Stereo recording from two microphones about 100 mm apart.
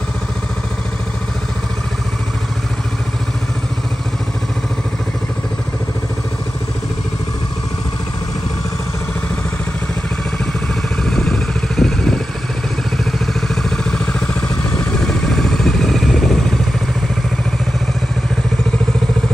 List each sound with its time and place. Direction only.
11.1 s vehicle: 5° left (ahead or behind)
13.6 s vehicle: 5° left (ahead or behind)